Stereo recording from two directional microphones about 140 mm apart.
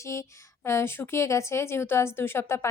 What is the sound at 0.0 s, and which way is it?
A woman's voice, 20° left (ahead or behind).